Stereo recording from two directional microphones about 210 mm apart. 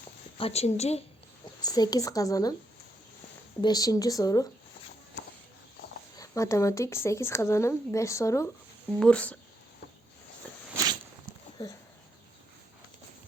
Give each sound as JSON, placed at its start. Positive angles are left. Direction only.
{"t": 0.3, "sound": "a woman's voice", "side_deg": 30}
{"t": 1.6, "sound": "a woman's voice", "side_deg": 20}
{"t": 3.6, "sound": "a woman's voice", "side_deg": 20}
{"t": 6.1, "sound": "a woman's voice", "side_deg": 15}